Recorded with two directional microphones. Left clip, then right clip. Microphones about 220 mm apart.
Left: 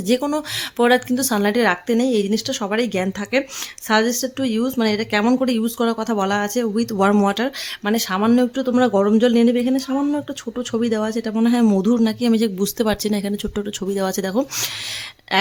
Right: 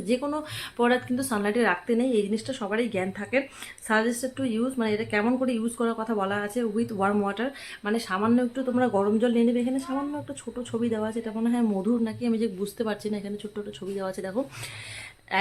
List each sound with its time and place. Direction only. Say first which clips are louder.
0.1 s speech: left 8 dB; 40° left (ahead or behind)